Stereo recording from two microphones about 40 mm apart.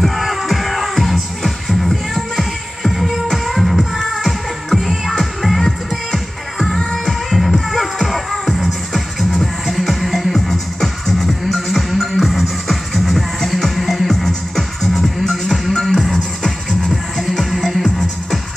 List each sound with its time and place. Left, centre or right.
0.0 s music: centre
4.8 s music: centre
5.7 s music: centre